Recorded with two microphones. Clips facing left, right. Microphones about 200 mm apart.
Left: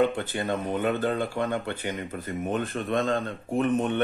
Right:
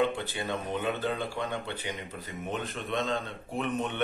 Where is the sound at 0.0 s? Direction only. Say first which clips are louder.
Left 4 dB; 50° left (ahead or behind).